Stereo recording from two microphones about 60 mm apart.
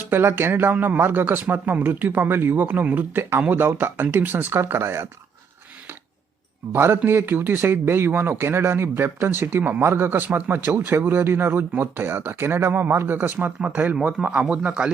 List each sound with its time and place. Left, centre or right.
0.1 s a man's voice: right
6.7 s a man's voice: right
13.6 s a man's voice: right